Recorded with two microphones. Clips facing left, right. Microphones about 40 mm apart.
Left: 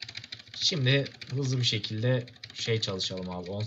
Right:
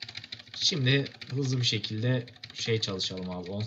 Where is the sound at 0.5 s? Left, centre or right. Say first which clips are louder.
Even; centre.